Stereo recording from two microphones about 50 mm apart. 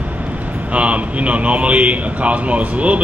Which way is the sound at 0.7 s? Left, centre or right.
Right.